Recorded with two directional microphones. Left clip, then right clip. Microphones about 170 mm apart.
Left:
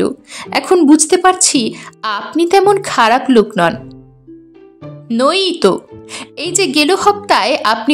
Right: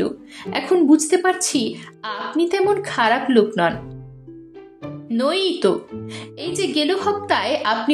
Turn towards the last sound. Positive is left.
turn(degrees=35)  # may be behind; listen again after turning